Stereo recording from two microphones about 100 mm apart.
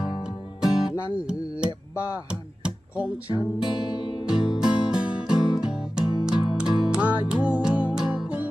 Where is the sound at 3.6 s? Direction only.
45° left (ahead or behind).